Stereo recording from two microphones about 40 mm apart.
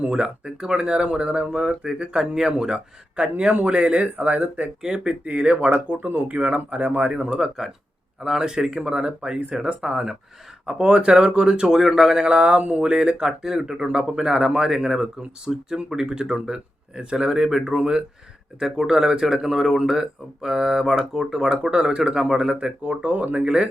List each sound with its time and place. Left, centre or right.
0.1 s speech: right
4.8 s speech: right
5.2 s speech: right
5.7 s speech: right
7.1 s speech: right
7.3 s speech: centre
12.2 s speech: right
15.5 s speech: centre
15.9 s speech: centre
21.5 s speech: right
22.8 s speech: right